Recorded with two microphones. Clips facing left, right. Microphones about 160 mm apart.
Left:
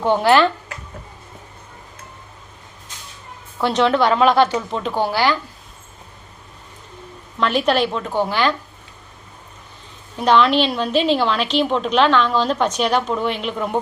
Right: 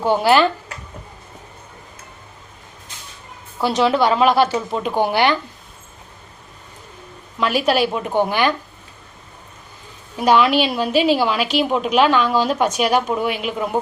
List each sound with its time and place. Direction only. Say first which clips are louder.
0.0 s a woman's voice: even; 5° right (ahead or behind)
3.6 s a woman's voice: even; 5° right (ahead or behind); by 5.4 s 20° right (ahead or behind)
7.3 s a woman's voice: even; 5° right (ahead or behind)
10.2 s a woman's voice: even; 10° right (ahead or behind)